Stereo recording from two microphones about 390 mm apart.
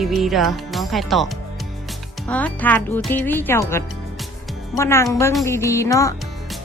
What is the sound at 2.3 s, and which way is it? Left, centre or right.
Speech, centre.